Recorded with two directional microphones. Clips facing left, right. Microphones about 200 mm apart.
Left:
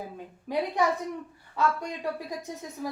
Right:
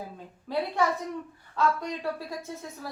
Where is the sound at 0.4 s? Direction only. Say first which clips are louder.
Left 1 dB; 15° left (ahead or behind).